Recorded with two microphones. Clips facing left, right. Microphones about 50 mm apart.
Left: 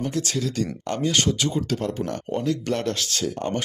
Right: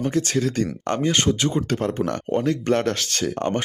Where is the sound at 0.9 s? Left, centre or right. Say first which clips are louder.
Right 2 dB; right.